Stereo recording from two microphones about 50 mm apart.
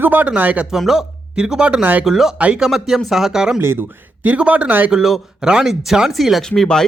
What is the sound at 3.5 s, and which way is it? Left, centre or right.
Speech, right.